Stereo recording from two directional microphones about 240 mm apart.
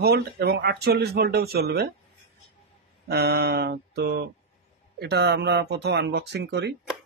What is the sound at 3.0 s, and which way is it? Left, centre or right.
Speech, right.